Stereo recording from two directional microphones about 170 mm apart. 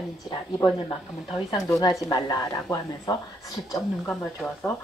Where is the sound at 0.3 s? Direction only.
20° left (ahead or behind).